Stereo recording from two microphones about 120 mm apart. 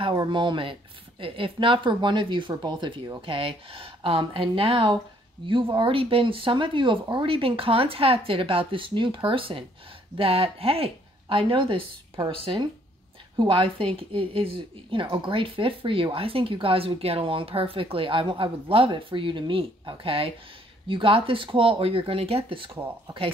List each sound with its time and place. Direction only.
0.1 s speech: 35° right (ahead or behind)